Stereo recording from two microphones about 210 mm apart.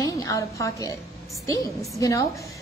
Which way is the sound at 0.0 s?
15° left (ahead or behind).